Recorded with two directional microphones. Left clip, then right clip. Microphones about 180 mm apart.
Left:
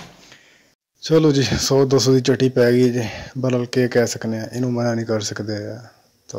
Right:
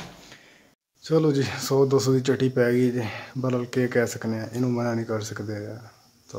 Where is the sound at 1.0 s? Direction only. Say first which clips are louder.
Left 6 dB; 30° left (ahead or behind).